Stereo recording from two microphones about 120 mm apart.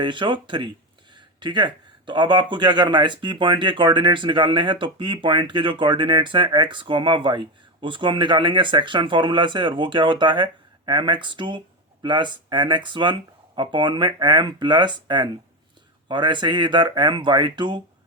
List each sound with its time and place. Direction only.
0.0 s speech: 45° right (ahead or behind)